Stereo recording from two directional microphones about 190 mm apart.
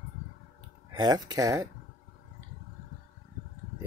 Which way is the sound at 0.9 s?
20° right (ahead or behind).